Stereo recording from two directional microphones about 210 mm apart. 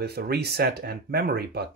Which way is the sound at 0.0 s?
50° right (ahead or behind).